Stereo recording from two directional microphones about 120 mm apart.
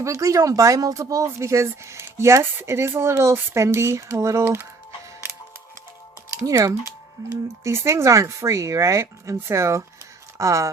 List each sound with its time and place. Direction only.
0.0 s speech: 25° right (ahead or behind)
6.3 s speech: 25° right (ahead or behind)